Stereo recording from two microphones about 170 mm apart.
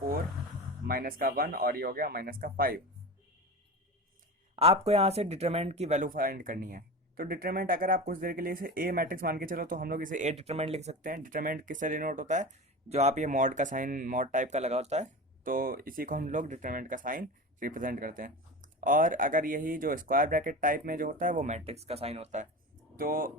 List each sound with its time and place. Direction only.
0.9 s speech: 60° right (ahead or behind)
4.5 s speech: 35° right (ahead or behind)
23.0 s speech: 55° right (ahead or behind)